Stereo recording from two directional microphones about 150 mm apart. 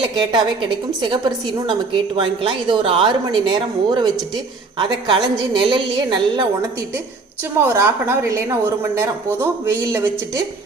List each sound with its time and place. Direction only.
0.2 s speech: 30° right (ahead or behind)
7.7 s a woman's voice: 20° right (ahead or behind)